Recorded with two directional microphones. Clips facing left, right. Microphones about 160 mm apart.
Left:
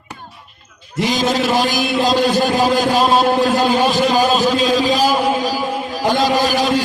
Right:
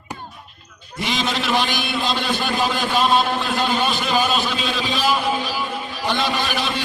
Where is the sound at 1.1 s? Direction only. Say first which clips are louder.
Left 5 dB; 40° left (ahead or behind).